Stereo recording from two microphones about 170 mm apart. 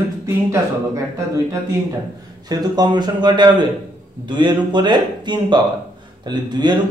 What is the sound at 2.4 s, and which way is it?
A man's voice, 25° right (ahead or behind).